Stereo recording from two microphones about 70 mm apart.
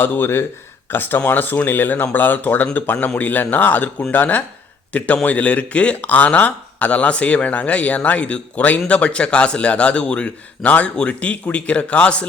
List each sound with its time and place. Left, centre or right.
0.0 s speech: left